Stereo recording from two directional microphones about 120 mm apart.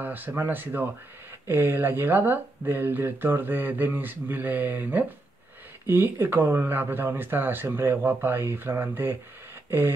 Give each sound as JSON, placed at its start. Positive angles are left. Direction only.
{"t": 0.0, "sound": "speech", "side_deg": -15}